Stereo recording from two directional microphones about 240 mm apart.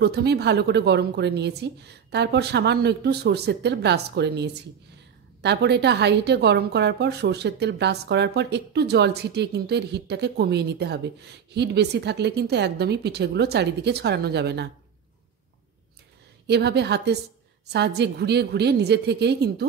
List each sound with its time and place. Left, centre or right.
0.0 s a woman's voice: right
16.4 s a woman's voice: right